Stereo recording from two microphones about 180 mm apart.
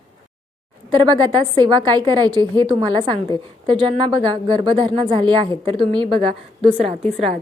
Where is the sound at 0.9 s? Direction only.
25° right (ahead or behind).